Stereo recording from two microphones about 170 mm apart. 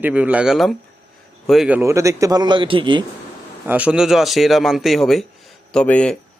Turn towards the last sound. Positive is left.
turn(degrees=5)  # may be behind; listen again after turning